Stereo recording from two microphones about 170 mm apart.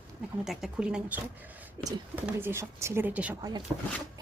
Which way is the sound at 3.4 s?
25° right (ahead or behind).